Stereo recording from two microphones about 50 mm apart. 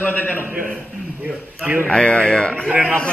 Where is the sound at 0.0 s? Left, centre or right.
Left.